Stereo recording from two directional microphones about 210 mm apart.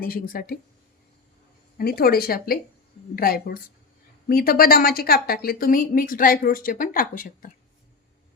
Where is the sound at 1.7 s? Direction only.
45° left (ahead or behind).